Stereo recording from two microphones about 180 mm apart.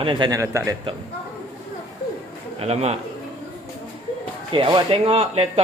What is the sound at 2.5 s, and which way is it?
Speech, 35° right (ahead or behind).